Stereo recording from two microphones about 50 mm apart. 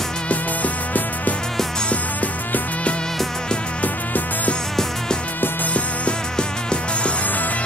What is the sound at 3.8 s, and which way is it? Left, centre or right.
Music, left.